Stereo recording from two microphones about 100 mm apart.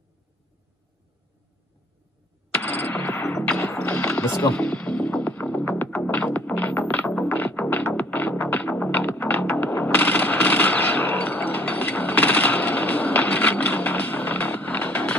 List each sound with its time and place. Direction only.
2.5 s music: 15° left (ahead or behind)